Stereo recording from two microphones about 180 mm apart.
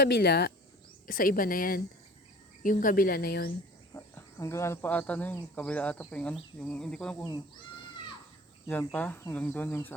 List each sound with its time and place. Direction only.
0.0 s speech: 65° left (ahead or behind)
1.0 s speech: 50° left (ahead or behind)
3.9 s speech: 15° left (ahead or behind)
8.6 s speech: 10° left (ahead or behind)